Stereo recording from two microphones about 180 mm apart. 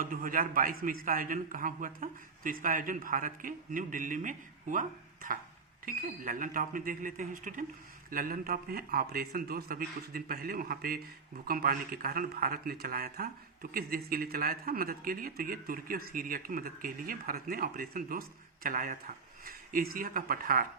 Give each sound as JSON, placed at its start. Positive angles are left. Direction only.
{"t": 0.0, "sound": "a man's voice", "side_deg": -50}